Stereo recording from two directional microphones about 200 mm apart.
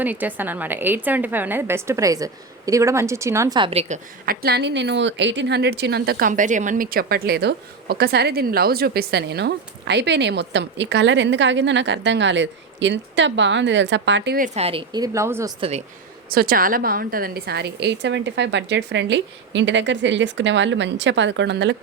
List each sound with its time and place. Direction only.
0.0 s a woman's voice: 10° right (ahead or behind); by 4.4 s 35° right (ahead or behind)
4.4 s speech: 55° right (ahead or behind)
14.3 s a woman's voice: 35° right (ahead or behind); by 15.5 s 15° right (ahead or behind)
16.3 s speech: 45° right (ahead or behind)